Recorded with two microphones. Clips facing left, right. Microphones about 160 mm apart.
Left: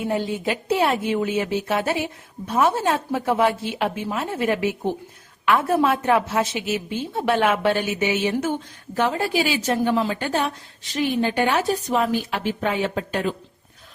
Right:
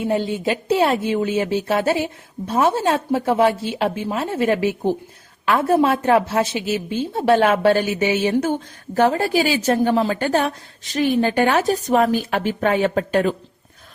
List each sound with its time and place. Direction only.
0.1 s a woman's voice: 25° right (ahead or behind); by 13.3 s 50° right (ahead or behind)